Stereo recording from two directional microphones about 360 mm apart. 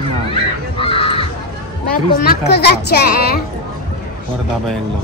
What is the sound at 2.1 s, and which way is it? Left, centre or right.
Speech, left.